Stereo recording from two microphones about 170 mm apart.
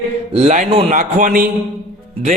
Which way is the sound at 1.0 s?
50° right (ahead or behind).